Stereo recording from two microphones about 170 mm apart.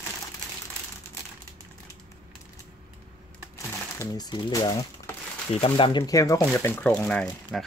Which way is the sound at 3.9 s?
25° left (ahead or behind).